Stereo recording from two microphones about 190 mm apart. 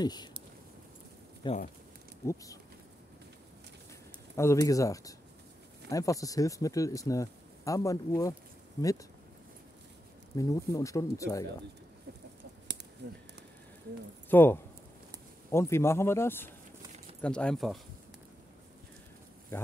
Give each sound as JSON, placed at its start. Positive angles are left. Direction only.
{"t": 0.0, "sound": "speech", "side_deg": 20}
{"t": 1.4, "sound": "speech", "side_deg": 25}
{"t": 4.4, "sound": "speech", "side_deg": 15}
{"t": 10.3, "sound": "speech", "side_deg": 15}
{"t": 13.0, "sound": "speech", "side_deg": -60}
{"t": 14.3, "sound": "speech", "side_deg": 10}
{"t": 19.5, "sound": "speech", "side_deg": 10}